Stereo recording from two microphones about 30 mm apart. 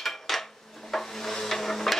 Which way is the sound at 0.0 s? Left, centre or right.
Centre.